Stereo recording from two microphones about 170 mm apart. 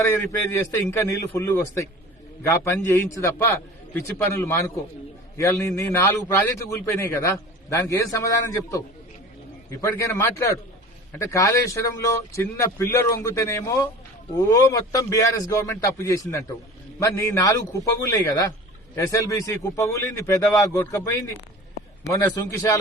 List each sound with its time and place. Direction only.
0.0 s a man's voice: 10° left (ahead or behind)
9.8 s a man's voice: 15° left (ahead or behind)